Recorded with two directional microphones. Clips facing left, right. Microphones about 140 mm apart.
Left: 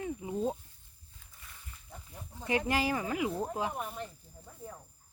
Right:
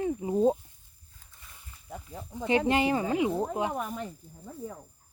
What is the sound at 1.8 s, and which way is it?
Speech, 85° right.